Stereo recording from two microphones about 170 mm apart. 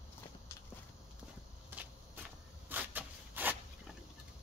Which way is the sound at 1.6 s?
10° right (ahead or behind).